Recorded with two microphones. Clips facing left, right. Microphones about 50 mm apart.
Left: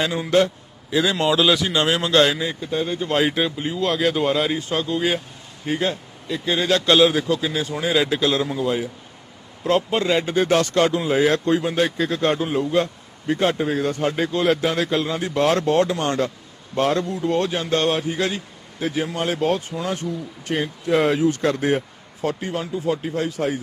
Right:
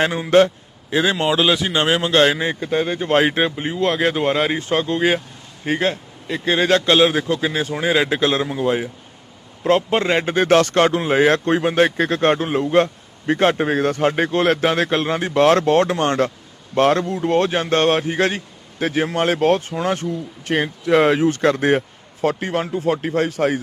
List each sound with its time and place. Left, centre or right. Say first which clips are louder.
0.3 s a sound: right 5 dB; right
1.2 s a man's voice: right 1 dB; right
16.7 s speech: right 4 dB; right
17.2 s speech: right 5 dB; right
20.5 s speech: right 4 dB; right